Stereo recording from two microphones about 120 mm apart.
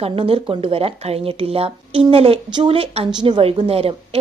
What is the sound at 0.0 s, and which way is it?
A woman's voice, 50° right (ahead or behind).